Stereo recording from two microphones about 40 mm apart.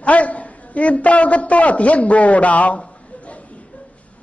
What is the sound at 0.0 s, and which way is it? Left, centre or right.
A man's voice, left.